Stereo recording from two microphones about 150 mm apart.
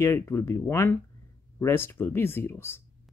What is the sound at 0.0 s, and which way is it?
Speech, 20° left (ahead or behind).